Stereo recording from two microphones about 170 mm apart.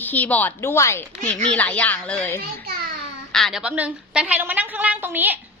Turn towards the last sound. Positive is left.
turn(degrees=-10)  # may be behind; listen again after turning